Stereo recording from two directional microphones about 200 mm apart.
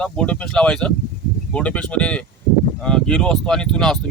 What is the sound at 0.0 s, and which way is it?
Speech, 5° left (ahead or behind).